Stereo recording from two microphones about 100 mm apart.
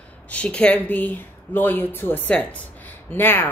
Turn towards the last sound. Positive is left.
turn(degrees=20)  # may be behind; listen again after turning